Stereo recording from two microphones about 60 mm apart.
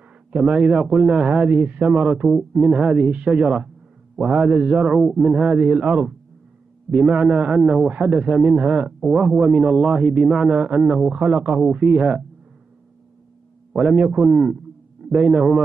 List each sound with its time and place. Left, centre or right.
0.4 s a man's voice: centre
13.7 s a man's voice: centre